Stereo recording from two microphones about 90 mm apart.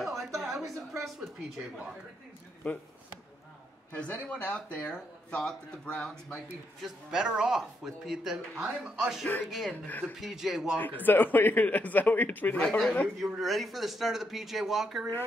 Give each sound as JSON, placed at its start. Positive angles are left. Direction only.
{"t": 0.0, "sound": "a sound", "side_deg": 0}
{"t": 2.6, "sound": "speech", "side_deg": 15}
{"t": 3.9, "sound": "speech", "side_deg": 15}
{"t": 6.0, "sound": "speech", "side_deg": 0}
{"t": 9.8, "sound": "speech", "side_deg": 20}
{"t": 10.1, "sound": "speech", "side_deg": -5}
{"t": 10.8, "sound": "a man's voice", "side_deg": 20}
{"t": 12.6, "sound": "speech", "side_deg": 5}